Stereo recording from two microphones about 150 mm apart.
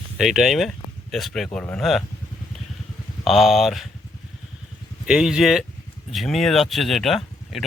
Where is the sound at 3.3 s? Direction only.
Centre (ahead or behind).